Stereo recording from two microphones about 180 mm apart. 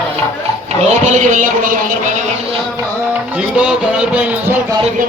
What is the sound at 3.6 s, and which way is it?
Music, 5° right (ahead or behind).